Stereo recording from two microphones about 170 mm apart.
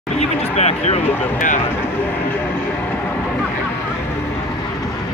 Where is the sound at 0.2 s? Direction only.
40° left (ahead or behind).